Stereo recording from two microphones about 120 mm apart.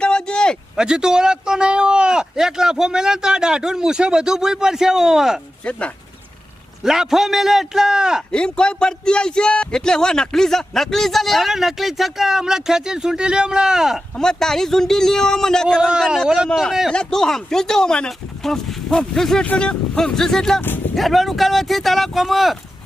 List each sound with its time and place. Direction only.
0.0 s a sound: 10° left (ahead or behind)
0.8 s speech: 5° right (ahead or behind)
5.6 s speech: 10° left (ahead or behind)
6.8 s speech: 5° right (ahead or behind)
8.3 s speech: 5° left (ahead or behind)
20.6 s speech: 15° left (ahead or behind)
20.9 s speech: centre (ahead or behind)